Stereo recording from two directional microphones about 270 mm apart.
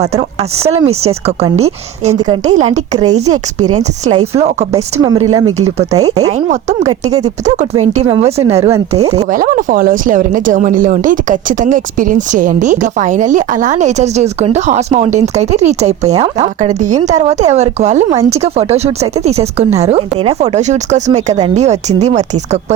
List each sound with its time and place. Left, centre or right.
0.6 s speech: right
5.9 s speech: centre